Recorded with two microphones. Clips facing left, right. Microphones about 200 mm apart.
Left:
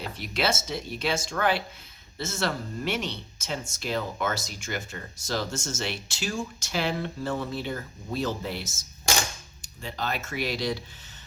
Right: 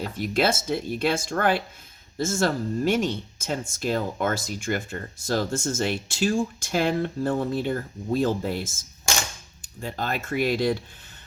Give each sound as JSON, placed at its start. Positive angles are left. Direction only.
{"t": 0.0, "sound": "speech", "side_deg": -50}